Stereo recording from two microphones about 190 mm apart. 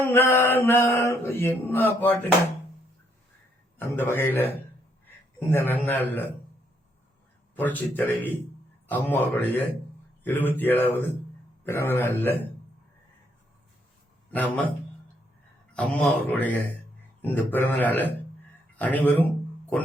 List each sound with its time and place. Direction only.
0.0 s mantra: 10° left (ahead or behind)
3.8 s mantra: 10° left (ahead or behind)
5.0 s a man's voice: 10° left (ahead or behind)
7.5 s mantra: 10° left (ahead or behind)
14.3 s a man's voice: 10° left (ahead or behind)
15.7 s mantra: 5° left (ahead or behind)